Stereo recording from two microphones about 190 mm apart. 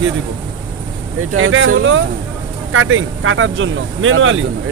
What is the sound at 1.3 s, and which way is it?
Speech, 90° right.